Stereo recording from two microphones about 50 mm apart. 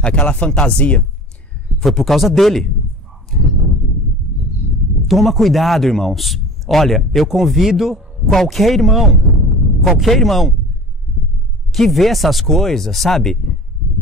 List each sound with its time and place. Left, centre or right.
0.0 s speech: centre
1.8 s a man's voice: centre
3.3 s a sound: centre
5.0 s a man's voice: centre
8.3 s a man's voice: centre
11.7 s a man's voice: centre